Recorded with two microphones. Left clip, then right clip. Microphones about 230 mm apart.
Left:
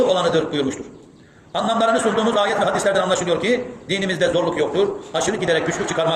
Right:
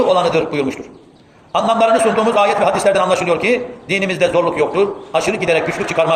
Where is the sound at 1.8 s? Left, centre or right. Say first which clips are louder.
Right 4 dB; right.